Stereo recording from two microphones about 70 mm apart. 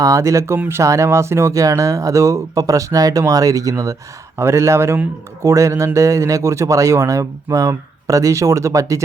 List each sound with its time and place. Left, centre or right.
0.0 s a man's voice: right
4.4 s a man's voice: right